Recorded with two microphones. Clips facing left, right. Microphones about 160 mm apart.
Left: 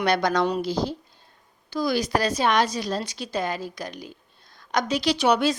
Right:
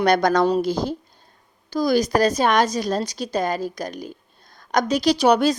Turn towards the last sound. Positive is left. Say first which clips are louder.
# right 4 dB
turn(degrees=-40)  # may be behind; listen again after turning